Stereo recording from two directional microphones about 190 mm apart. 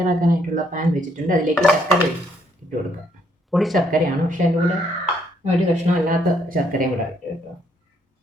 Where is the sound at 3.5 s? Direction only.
Centre (ahead or behind).